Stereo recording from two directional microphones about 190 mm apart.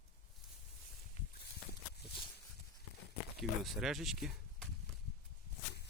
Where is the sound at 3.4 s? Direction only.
Centre (ahead or behind).